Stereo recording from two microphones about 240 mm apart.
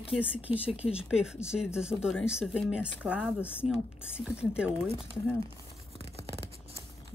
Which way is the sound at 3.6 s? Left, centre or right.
Left.